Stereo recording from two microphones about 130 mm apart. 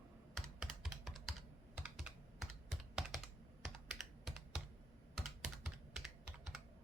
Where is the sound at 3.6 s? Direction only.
Centre (ahead or behind).